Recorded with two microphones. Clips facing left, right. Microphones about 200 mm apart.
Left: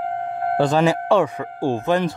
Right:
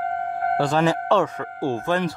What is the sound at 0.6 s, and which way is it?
Speech, 20° left (ahead or behind).